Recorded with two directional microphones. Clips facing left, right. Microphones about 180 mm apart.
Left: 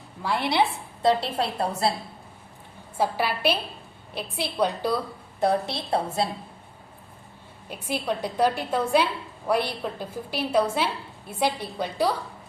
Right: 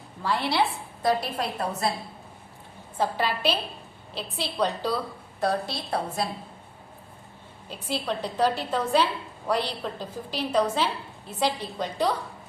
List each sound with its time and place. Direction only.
0.2 s a woman's voice: 15° left (ahead or behind)
1.0 s a woman's voice: 30° left (ahead or behind)
3.0 s a woman's voice: 10° left (ahead or behind)
5.4 s a woman's voice: 25° left (ahead or behind)
7.7 s a woman's voice: 10° left (ahead or behind)